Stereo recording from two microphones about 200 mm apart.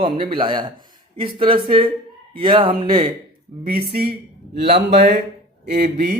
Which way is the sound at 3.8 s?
50° right (ahead or behind).